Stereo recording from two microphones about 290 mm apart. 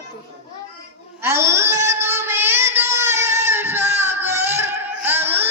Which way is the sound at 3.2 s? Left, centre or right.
Centre.